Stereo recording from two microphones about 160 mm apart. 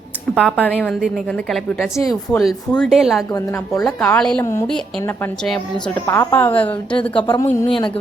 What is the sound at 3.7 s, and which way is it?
A woman's voice, 5° left (ahead or behind).